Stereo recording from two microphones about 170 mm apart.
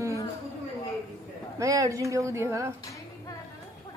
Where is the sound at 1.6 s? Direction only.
20° right (ahead or behind).